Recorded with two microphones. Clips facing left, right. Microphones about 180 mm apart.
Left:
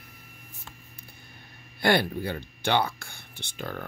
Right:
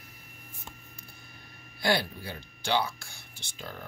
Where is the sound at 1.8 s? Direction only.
55° left (ahead or behind).